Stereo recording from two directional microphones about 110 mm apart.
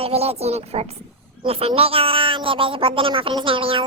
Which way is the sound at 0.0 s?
65° right (ahead or behind).